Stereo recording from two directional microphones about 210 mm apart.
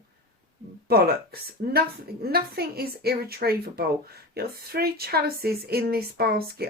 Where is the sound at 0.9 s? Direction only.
45° right (ahead or behind).